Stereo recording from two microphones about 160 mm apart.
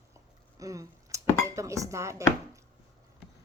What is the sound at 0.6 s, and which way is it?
Speech, 20° right (ahead or behind).